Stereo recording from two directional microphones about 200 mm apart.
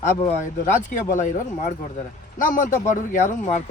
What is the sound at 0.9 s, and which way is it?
Speech, 40° left (ahead or behind).